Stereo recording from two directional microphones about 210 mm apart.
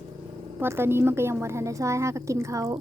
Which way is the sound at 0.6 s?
10° right (ahead or behind).